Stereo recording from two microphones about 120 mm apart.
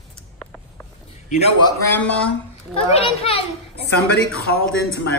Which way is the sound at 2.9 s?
55° left (ahead or behind).